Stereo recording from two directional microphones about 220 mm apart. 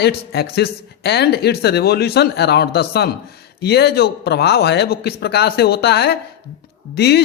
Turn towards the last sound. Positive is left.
turn(degrees=50)  # may be behind; listen again after turning